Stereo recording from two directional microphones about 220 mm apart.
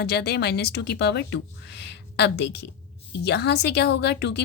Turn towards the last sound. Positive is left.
turn(degrees=50)  # may be behind; listen again after turning